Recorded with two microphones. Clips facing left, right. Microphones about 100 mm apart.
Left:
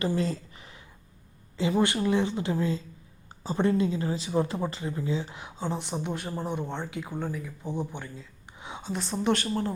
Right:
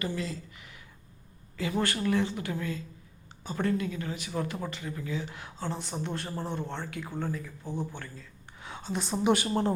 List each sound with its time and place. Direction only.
0.1 s a sound: 35° left (ahead or behind)
1.5 s speech: 25° left (ahead or behind)
8.9 s a woman's voice: 5° right (ahead or behind)